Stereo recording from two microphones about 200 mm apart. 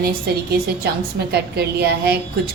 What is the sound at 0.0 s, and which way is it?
A woman's voice, 50° right (ahead or behind).